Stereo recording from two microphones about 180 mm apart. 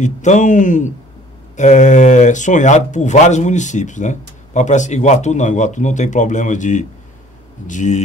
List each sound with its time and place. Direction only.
0.0 s speech: 40° left (ahead or behind)